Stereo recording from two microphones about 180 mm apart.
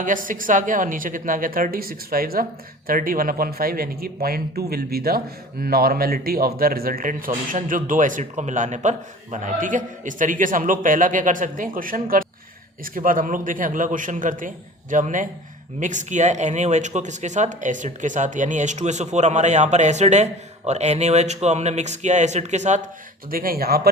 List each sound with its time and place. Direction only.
0.0 s speech: 50° right (ahead or behind)
23.3 s speech: 55° right (ahead or behind)